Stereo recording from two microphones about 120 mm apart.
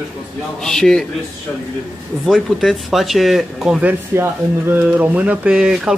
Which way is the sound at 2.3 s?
Centre (ahead or behind).